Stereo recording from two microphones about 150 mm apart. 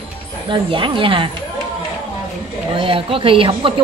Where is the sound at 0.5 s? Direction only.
35° right (ahead or behind).